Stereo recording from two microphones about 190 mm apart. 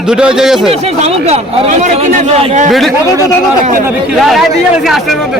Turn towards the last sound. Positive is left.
turn(degrees=0)  # may be behind; listen again after turning